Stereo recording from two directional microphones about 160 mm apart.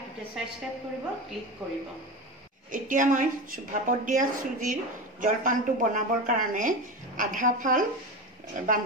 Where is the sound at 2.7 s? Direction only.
55° right (ahead or behind).